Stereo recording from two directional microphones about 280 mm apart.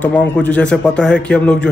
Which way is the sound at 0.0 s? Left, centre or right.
Centre.